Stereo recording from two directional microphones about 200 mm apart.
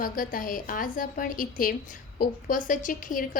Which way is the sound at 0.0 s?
45° left (ahead or behind).